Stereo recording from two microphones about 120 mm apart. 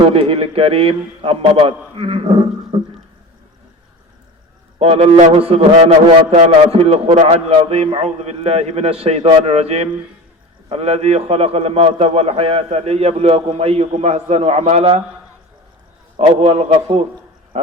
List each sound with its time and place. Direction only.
0.0 s a man's voice: 50° right (ahead or behind)
4.8 s a man's voice: 55° right (ahead or behind)
16.1 s a man's voice: 55° right (ahead or behind)